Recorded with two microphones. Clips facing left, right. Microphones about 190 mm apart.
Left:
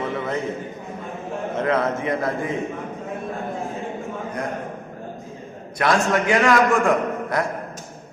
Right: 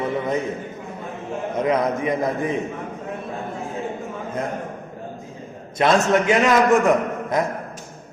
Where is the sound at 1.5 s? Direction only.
15° right (ahead or behind).